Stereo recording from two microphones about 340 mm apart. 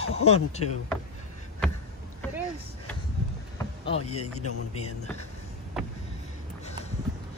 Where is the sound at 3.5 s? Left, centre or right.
Centre.